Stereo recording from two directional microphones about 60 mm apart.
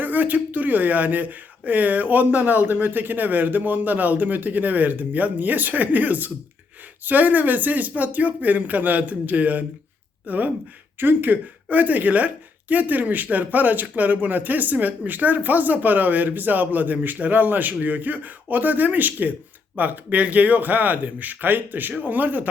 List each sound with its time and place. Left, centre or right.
0.0 s speech: right